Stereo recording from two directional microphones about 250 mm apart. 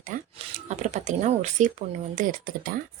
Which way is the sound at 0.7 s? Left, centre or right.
Right.